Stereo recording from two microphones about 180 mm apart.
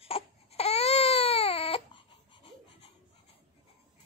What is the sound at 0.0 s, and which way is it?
Baby cry, 35° left (ahead or behind).